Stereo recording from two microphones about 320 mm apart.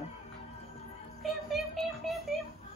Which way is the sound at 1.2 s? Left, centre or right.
Centre.